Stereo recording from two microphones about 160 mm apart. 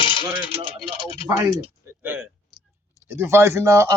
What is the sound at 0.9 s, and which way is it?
Speech, 35° left (ahead or behind).